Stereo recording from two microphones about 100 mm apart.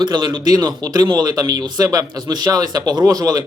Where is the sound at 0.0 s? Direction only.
45° right (ahead or behind).